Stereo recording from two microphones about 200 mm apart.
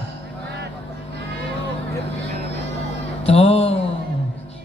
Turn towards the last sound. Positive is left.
turn(degrees=30)  # may be behind; listen again after turning